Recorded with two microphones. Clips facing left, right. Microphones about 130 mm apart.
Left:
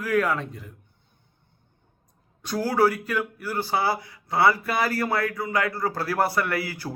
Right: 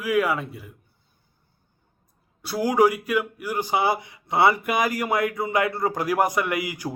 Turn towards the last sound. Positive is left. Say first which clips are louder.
# right 2 dB
turn(degrees=-15)  # may be behind; listen again after turning